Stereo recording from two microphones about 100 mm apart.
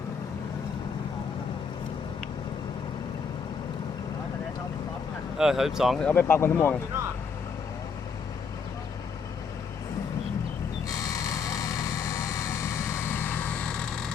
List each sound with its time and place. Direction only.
5.4 s speech: 5° right (ahead or behind)
6.0 s speech: 15° left (ahead or behind)
10.8 s a sound: 35° left (ahead or behind); by 14.1 s 10° left (ahead or behind)